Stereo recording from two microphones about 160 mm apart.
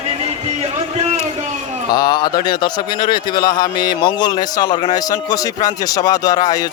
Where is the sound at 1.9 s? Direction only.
25° left (ahead or behind).